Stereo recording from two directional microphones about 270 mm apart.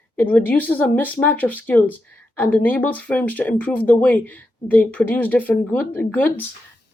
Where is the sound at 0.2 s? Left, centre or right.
Centre.